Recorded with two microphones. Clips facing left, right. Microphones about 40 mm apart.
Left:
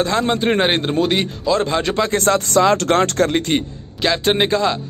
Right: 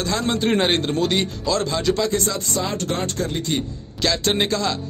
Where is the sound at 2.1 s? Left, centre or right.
Left.